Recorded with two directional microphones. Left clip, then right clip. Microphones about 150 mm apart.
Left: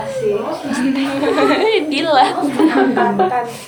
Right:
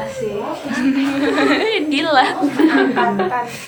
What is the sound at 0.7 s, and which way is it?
A woman's voice, centre (ahead or behind).